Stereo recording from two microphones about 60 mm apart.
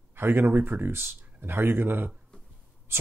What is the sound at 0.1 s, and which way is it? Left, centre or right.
Speech, right.